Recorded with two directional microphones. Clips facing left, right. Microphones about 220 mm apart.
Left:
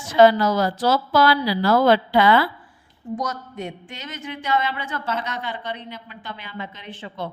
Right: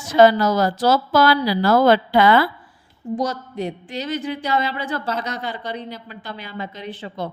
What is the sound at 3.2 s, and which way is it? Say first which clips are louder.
A woman's voice: right 6 dB; 30° right (ahead or behind).